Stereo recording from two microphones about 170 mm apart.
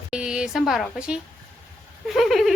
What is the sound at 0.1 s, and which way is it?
A woman's voice, 5° right (ahead or behind).